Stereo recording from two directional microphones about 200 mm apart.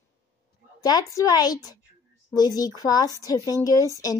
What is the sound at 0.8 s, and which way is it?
A woman's voice, 20° left (ahead or behind).